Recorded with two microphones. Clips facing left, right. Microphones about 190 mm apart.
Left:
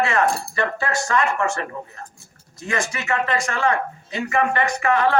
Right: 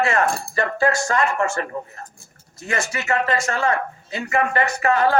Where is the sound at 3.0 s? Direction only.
35° right (ahead or behind).